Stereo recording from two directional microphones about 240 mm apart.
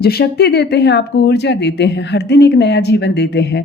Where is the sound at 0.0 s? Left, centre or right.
Left.